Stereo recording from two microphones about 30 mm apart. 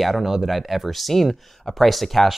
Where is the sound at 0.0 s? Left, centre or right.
Centre.